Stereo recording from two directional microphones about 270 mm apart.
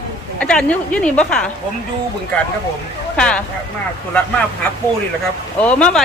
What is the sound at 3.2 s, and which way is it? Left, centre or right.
Speech, centre.